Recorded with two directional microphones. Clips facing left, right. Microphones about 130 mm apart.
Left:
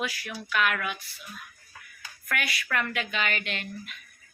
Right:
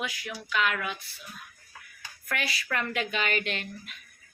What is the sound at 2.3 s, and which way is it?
Speech, 30° right (ahead or behind).